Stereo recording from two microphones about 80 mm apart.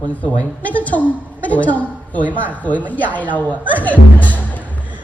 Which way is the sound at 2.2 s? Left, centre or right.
Right.